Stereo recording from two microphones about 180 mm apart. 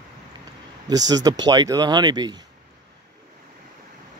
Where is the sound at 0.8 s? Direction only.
20° right (ahead or behind).